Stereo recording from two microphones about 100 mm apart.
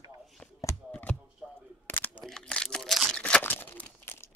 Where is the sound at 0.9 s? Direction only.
15° left (ahead or behind).